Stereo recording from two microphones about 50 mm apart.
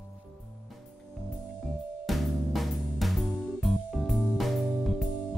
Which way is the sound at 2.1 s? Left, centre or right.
Centre.